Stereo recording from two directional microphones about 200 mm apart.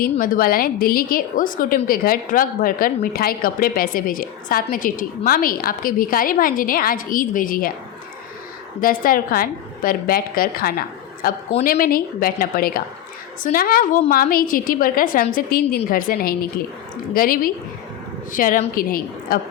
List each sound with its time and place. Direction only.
0.0 s a woman's voice: 45° left (ahead or behind)
8.8 s a woman's voice: 45° left (ahead or behind)